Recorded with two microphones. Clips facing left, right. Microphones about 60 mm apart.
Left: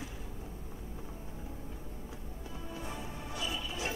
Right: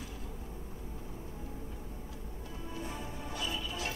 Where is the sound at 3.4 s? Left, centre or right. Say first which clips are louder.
Even; left.